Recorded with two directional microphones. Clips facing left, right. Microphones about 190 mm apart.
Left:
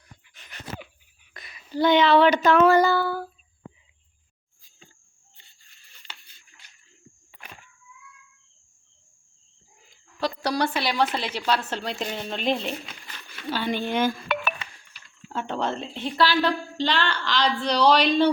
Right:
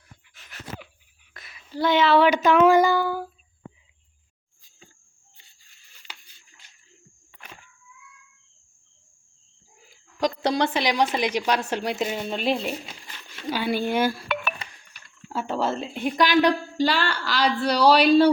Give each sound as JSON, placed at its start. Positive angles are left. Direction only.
{"t": 0.3, "sound": "dog", "side_deg": 0}
{"t": 1.3, "sound": "a sound", "side_deg": 0}
{"t": 9.9, "sound": "a woman's voice", "side_deg": -15}
{"t": 12.8, "sound": "a sound", "side_deg": -25}
{"t": 13.1, "sound": "speech", "side_deg": -15}
{"t": 15.3, "sound": "speech", "side_deg": -5}